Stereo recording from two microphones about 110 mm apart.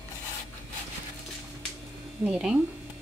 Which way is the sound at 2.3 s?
5° right (ahead or behind).